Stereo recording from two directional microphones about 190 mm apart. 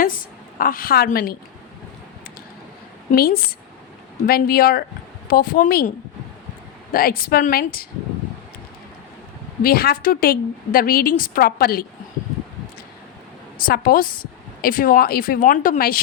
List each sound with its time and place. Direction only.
0.6 s a woman's voice: 50° left (ahead or behind)
3.1 s a woman's voice: 50° left (ahead or behind)
6.9 s a woman's voice: 50° left (ahead or behind)
9.6 s a woman's voice: 50° left (ahead or behind)
13.7 s a woman's voice: 50° left (ahead or behind)